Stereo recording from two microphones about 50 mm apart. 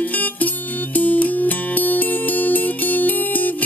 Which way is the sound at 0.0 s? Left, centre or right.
Left.